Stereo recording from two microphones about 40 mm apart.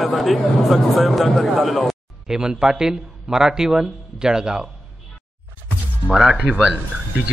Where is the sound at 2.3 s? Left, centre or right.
Centre.